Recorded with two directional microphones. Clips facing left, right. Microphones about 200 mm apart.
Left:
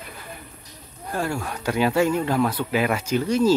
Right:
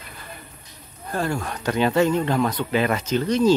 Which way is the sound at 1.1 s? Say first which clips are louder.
Right 1 dB; 10° left (ahead or behind).